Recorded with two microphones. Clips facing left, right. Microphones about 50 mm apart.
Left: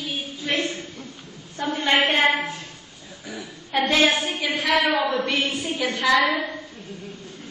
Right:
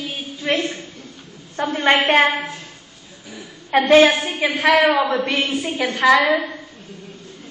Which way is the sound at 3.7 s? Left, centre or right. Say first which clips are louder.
Right 7 dB; right.